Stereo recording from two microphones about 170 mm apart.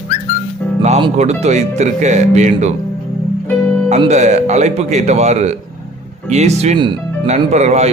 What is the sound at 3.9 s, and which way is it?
Speech, 40° right (ahead or behind).